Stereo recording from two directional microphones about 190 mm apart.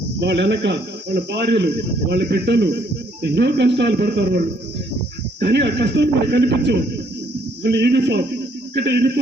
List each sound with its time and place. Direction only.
0.2 s speech: 65° right (ahead or behind)
5.4 s speech: 60° right (ahead or behind)